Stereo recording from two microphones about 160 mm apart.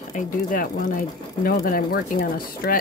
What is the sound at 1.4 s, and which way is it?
A woman's voice, 65° left (ahead or behind).